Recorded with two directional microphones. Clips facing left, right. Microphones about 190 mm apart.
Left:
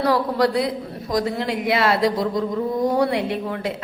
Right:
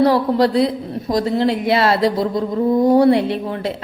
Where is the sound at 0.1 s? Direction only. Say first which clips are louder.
Right 4 dB; 30° right (ahead or behind).